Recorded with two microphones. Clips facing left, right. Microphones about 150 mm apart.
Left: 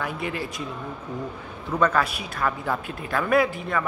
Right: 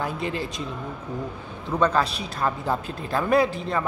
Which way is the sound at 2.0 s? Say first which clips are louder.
Right 1 dB; 30° right (ahead or behind).